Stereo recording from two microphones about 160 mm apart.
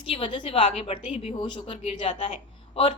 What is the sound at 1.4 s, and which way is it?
Speech, 30° left (ahead or behind).